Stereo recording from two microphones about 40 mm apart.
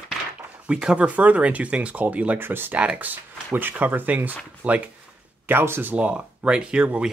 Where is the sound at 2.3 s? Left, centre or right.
Right.